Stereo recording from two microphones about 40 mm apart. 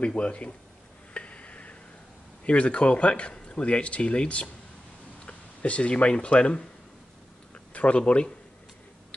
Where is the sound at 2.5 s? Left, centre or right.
Left.